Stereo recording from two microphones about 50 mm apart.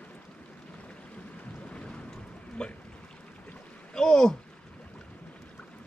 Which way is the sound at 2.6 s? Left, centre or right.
Centre.